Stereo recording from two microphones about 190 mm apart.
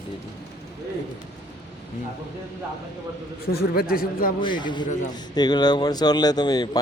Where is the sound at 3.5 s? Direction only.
55° left (ahead or behind).